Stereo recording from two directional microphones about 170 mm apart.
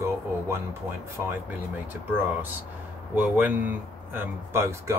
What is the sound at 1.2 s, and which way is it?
Speech, 15° right (ahead or behind).